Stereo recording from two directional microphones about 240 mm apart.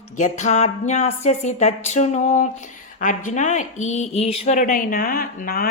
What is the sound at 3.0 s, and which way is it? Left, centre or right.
Speech, left.